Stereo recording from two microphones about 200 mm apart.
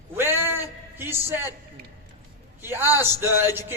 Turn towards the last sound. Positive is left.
turn(degrees=-10)  # may be behind; listen again after turning